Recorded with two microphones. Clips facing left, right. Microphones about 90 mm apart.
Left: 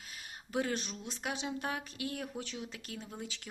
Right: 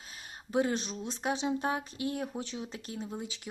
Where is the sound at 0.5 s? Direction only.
25° right (ahead or behind).